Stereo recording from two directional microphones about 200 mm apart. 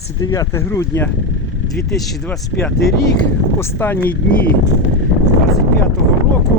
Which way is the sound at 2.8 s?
55° left (ahead or behind).